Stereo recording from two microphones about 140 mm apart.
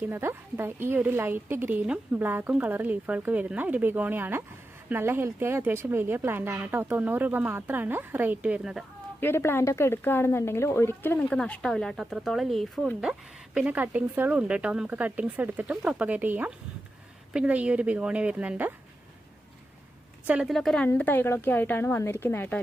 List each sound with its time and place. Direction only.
0.0 s speech: 15° right (ahead or behind)
9.2 s speech: 15° left (ahead or behind); by 18.7 s 10° right (ahead or behind)
20.2 s speech: 5° right (ahead or behind); by 22.6 s 15° left (ahead or behind)